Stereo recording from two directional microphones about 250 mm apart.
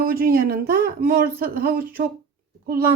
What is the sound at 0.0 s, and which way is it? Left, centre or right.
A woman's voice, right.